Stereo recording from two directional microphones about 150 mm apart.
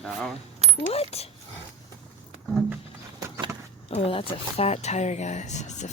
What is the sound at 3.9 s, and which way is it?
Speech, 40° left (ahead or behind).